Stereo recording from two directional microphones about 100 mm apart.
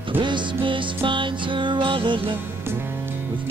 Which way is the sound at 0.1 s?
50° right (ahead or behind).